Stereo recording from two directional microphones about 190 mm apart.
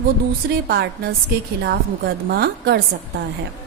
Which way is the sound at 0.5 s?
60° right (ahead or behind).